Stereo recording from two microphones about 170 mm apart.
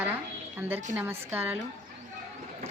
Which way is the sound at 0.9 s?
10° right (ahead or behind).